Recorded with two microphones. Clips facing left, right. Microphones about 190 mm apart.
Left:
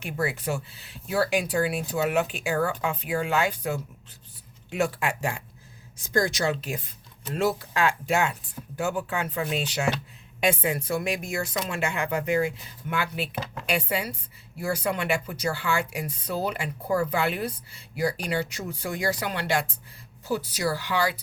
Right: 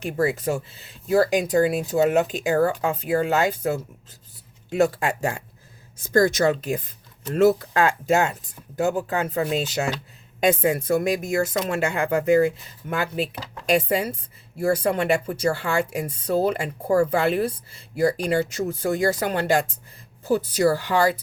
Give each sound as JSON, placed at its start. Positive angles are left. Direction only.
{"t": 0.2, "sound": "speech", "side_deg": -40}